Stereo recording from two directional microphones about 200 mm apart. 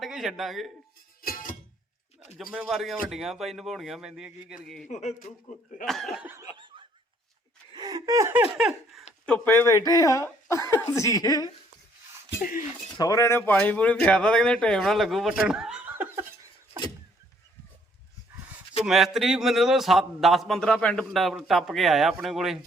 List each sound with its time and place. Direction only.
0.0 s speech: centre (ahead or behind)
1.2 s music: 45° left (ahead or behind)
2.5 s a man's voice: 5° right (ahead or behind)
4.9 s a man's voice: 35° left (ahead or behind)
5.8 s a man's voice: centre (ahead or behind)
7.7 s laughter: 20° right (ahead or behind); by 9.0 s 5° right (ahead or behind)
9.2 s speech: 5° left (ahead or behind)
12.4 s speech: 40° left (ahead or behind)
12.9 s a man's voice: 20° left (ahead or behind); by 16.2 s 10° right (ahead or behind)
18.9 s a man's voice: centre (ahead or behind)